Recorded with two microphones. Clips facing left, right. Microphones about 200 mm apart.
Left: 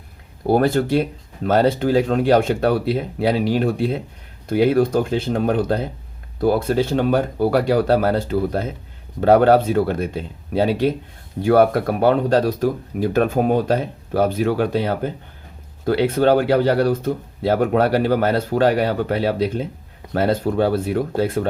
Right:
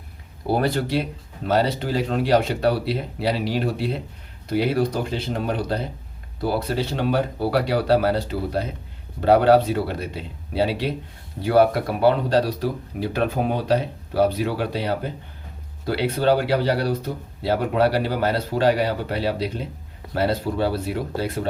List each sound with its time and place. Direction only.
0.4 s speech: 50° left (ahead or behind)